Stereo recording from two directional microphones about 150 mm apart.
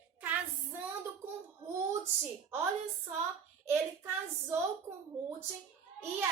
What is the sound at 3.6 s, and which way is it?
Speech, 15° right (ahead or behind).